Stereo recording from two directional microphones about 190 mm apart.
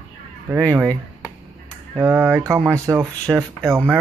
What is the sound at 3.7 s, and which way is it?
Speech, 10° right (ahead or behind).